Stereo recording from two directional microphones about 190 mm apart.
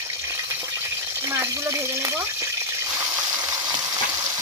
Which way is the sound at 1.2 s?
15° right (ahead or behind).